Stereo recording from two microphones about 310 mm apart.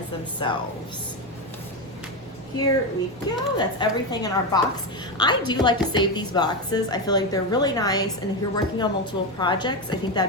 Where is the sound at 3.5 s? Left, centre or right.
Centre.